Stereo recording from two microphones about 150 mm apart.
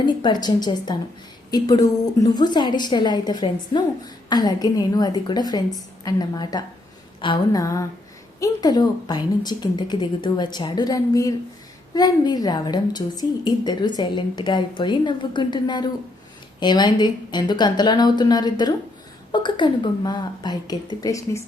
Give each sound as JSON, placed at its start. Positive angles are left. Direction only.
{"t": 0.0, "sound": "a woman's voice", "side_deg": 30}
{"t": 7.2, "sound": "a sound", "side_deg": 35}
{"t": 7.6, "sound": "a woman's voice", "side_deg": 20}